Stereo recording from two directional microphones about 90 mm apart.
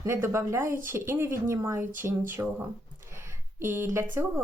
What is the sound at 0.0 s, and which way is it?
A woman's voice, 30° right (ahead or behind).